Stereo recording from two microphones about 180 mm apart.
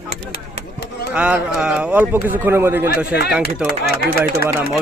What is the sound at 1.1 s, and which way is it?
Speech, 5° right (ahead or behind).